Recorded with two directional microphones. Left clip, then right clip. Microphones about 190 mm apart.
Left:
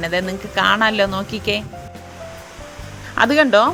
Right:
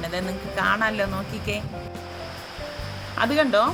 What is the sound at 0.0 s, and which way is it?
Speech, 40° left (ahead or behind).